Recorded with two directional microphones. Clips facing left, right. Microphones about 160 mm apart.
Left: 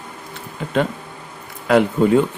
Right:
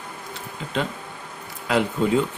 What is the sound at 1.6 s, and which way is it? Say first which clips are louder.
Speech: left 7 dB; 55° left (ahead or behind).